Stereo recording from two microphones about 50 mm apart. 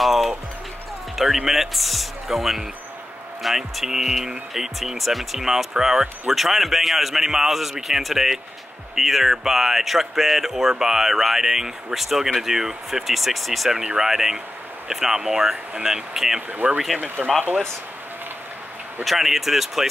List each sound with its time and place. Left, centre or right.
0.0 s music: centre
1.1 s speech: centre
13.7 s speech: centre
16.6 s speech: right
19.0 s speech: centre